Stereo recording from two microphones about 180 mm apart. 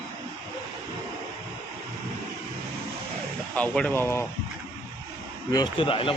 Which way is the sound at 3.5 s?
5° left (ahead or behind).